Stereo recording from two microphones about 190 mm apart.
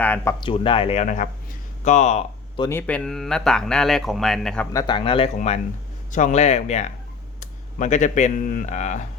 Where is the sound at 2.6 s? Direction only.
10° left (ahead or behind).